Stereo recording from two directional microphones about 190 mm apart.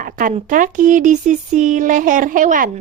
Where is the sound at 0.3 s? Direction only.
45° right (ahead or behind).